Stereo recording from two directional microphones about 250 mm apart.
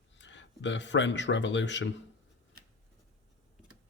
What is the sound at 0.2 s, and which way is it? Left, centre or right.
Speech, left.